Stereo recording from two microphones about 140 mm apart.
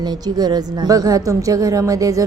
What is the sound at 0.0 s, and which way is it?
A woman's voice, 30° right (ahead or behind).